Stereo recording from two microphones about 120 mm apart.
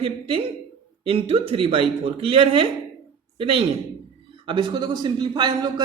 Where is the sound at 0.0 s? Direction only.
50° right (ahead or behind).